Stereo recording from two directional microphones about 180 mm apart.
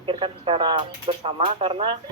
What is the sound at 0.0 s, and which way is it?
Speech, 25° right (ahead or behind).